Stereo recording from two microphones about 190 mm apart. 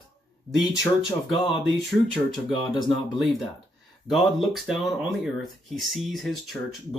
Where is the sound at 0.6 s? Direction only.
20° left (ahead or behind).